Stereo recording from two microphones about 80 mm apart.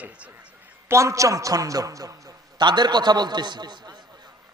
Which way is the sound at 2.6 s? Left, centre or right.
Right.